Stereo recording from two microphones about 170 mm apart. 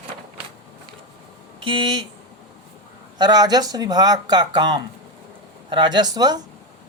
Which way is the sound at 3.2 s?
25° right (ahead or behind).